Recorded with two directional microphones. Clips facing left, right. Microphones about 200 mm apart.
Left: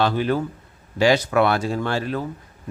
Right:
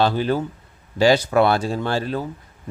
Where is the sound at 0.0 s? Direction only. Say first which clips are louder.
Right 1 dB; 30° right (ahead or behind).